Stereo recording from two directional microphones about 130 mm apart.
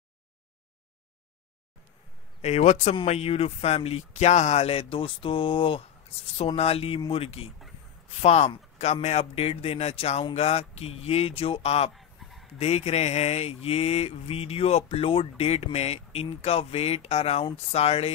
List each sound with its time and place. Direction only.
2.4 s speech: 55° left (ahead or behind)
3.1 s mantra: 50° left (ahead or behind)
8.2 s speech: 55° left (ahead or behind)
9.3 s mantra: 50° left (ahead or behind)
11.9 s dog: centre (ahead or behind)
12.5 s mantra: 55° left (ahead or behind)